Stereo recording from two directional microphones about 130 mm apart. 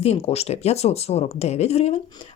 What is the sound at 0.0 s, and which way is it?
Speech, 50° left (ahead or behind).